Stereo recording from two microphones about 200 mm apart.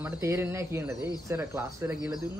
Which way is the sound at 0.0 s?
15° right (ahead or behind).